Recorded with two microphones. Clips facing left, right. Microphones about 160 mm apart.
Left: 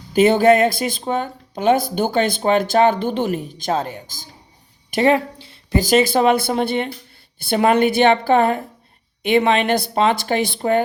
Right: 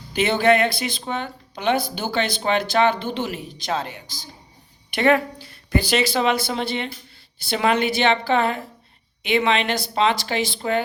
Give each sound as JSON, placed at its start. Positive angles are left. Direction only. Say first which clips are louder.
{"t": 0.1, "sound": "speech", "louder": "left 5 dB", "side_deg": 45}
{"t": 4.9, "sound": "a woman's voice", "louder": "left 2 dB", "side_deg": 35}
{"t": 5.8, "sound": "speech", "louder": "left 7 dB", "side_deg": 45}